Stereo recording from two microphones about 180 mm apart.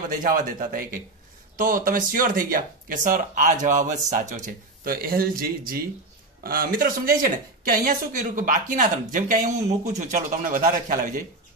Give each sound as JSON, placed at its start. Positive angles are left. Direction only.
{"t": 0.1, "sound": "speech", "side_deg": -50}